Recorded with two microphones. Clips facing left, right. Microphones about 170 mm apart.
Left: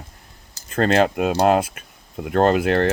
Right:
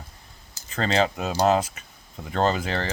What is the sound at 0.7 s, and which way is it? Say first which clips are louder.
Speech: left 6 dB; 55° left (ahead or behind).